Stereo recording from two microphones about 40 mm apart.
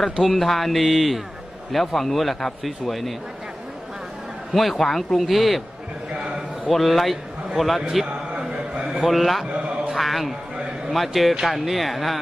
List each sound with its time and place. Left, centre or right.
0.2 s a man's voice: centre
4.5 s a man's voice: centre
6.1 s a sound: right
6.7 s a man's voice: centre
8.7 s a sound: centre
9.0 s a man's voice: centre